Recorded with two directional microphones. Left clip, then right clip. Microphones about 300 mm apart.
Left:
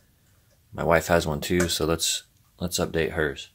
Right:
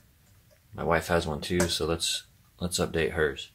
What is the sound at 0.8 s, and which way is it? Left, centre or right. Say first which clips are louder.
Speech: left 5 dB; left.